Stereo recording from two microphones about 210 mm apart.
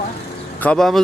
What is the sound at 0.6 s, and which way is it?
Speech, 5° left (ahead or behind).